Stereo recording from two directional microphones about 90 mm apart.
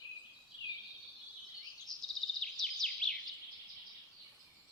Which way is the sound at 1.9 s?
5° left (ahead or behind).